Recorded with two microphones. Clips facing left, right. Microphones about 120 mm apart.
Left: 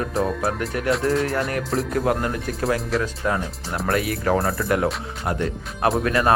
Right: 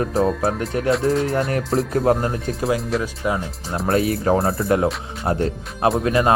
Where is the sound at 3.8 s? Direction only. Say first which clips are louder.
Right 4 dB; 30° right (ahead or behind).